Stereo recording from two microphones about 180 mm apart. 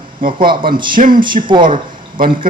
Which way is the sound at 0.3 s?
25° right (ahead or behind).